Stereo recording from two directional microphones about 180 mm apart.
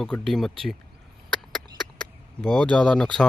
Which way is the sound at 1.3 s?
Centre (ahead or behind).